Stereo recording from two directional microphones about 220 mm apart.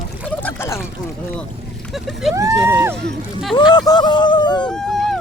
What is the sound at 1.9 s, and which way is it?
Speech, centre (ahead or behind).